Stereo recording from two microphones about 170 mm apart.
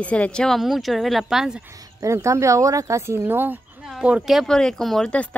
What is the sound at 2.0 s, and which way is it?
Speech, 15° right (ahead or behind).